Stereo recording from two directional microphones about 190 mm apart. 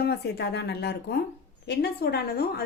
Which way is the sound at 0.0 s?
60° left (ahead or behind).